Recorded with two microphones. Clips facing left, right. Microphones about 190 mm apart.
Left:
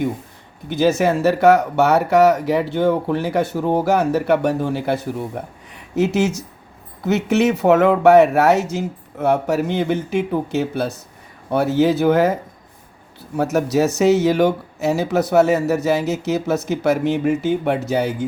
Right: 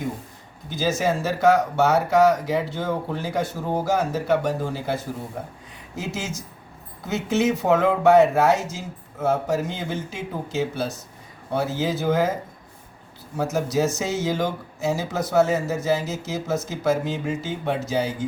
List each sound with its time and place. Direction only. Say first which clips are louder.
0.7 s speech: left 6 dB; 65° left (ahead or behind)